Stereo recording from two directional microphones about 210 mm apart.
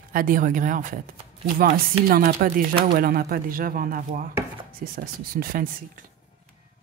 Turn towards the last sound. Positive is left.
turn(degrees=-40)  # may be behind; listen again after turning